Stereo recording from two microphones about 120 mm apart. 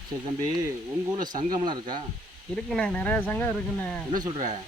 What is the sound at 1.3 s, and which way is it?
Speech, 40° right (ahead or behind).